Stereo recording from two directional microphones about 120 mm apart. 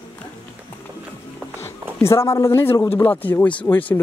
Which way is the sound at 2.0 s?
20° left (ahead or behind).